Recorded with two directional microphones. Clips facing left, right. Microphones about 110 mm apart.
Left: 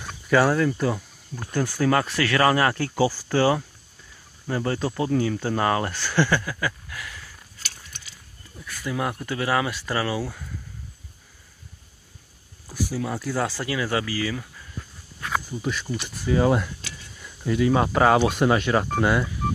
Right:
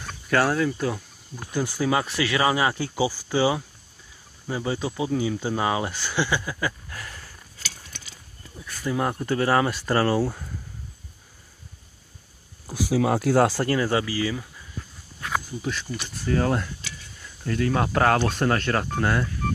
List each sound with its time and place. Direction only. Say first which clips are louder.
0.0 s speech: left 3 dB; centre (ahead or behind); by 6.7 s 15° right (ahead or behind)
6.9 s a sound: left 1 dB; 35° right (ahead or behind)
8.6 s speech: right 2 dB; 30° right (ahead or behind)
12.7 s speech: right 6 dB; 85° right; by 13.8 s 45° right (ahead or behind)
13.8 s speech: right 2 dB; 25° right (ahead or behind)
15.6 s speech: left 2 dB; centre (ahead or behind)